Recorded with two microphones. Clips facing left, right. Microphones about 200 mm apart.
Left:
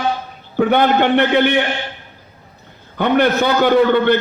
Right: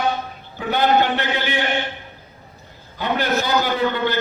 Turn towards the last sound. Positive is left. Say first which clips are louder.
# left 9 dB
turn(degrees=60)  # may be behind; listen again after turning